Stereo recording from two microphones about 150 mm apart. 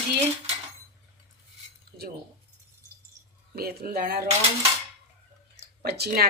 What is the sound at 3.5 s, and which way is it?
Speech, 90° right.